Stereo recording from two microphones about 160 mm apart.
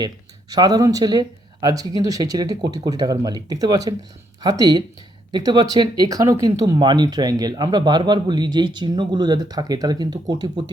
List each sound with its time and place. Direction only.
0.5 s speech: 25° right (ahead or behind)